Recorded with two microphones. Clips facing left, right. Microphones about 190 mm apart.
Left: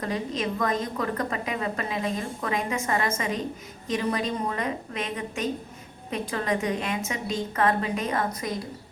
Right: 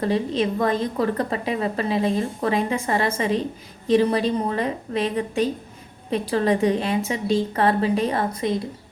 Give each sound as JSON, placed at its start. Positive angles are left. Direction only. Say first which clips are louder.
{"t": 0.0, "sound": "a woman's voice", "louder": "right 7 dB", "side_deg": -30}